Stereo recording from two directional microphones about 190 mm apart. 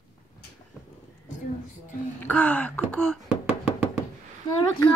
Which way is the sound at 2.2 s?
10° left (ahead or behind).